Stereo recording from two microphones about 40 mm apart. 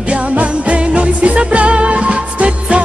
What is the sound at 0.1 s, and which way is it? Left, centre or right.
Music, right.